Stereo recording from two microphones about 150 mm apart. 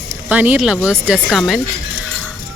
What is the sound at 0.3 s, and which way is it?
Speech, 10° right (ahead or behind).